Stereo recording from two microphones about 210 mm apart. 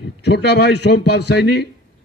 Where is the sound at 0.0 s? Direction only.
55° left (ahead or behind).